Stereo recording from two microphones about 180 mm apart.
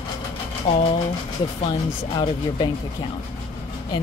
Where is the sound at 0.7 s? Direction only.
30° left (ahead or behind).